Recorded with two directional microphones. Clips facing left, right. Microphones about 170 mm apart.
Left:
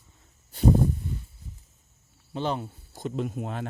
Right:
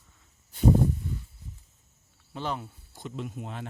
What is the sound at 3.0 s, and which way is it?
Speech, 45° left (ahead or behind).